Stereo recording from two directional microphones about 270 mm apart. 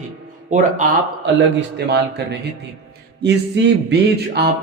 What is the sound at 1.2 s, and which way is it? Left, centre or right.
Speech, right.